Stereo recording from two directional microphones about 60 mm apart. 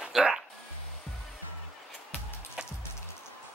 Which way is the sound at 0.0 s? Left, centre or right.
Centre.